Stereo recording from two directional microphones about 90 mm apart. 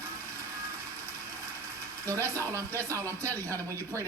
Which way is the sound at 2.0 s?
35° right (ahead or behind).